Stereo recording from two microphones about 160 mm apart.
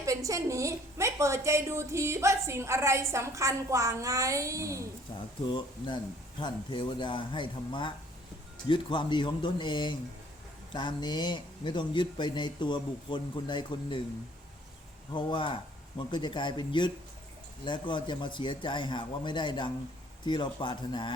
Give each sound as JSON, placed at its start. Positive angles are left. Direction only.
{"t": 0.0, "sound": "a woman's voice", "side_deg": -20}
{"t": 5.5, "sound": "speech", "side_deg": 30}
{"t": 15.1, "sound": "speech", "side_deg": 30}